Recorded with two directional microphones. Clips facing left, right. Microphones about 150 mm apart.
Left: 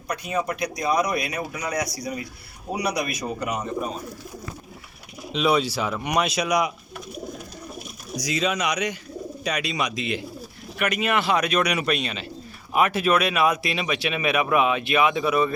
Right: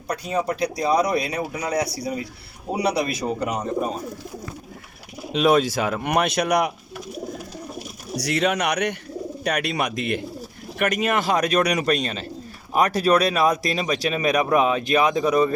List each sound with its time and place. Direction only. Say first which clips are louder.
0.1 s a man's voice: right 2 dB; 35° right (ahead or behind)
5.3 s speech: right 4 dB; 50° right (ahead or behind)
8.1 s speech: right 3 dB; 65° right (ahead or behind)
10.8 s speech: right 2 dB; 45° right (ahead or behind)